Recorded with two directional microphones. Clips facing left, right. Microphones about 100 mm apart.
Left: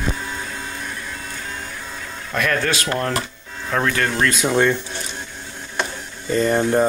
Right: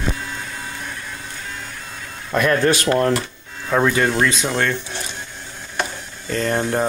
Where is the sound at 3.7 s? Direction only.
10° right (ahead or behind).